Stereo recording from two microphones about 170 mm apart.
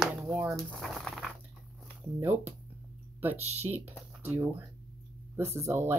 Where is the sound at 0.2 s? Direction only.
15° right (ahead or behind).